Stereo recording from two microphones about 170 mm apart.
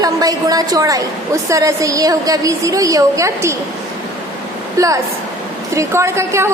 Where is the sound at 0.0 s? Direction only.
20° right (ahead or behind).